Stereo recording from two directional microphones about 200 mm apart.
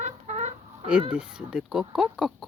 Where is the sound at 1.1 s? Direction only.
5° right (ahead or behind).